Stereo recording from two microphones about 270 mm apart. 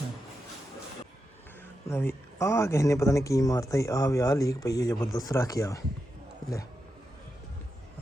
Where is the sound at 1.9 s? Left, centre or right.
Centre.